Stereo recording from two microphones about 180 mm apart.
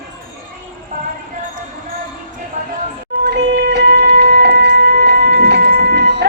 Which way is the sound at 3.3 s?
70° right (ahead or behind).